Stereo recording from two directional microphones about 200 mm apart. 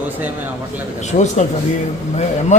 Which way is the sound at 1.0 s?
35° left (ahead or behind).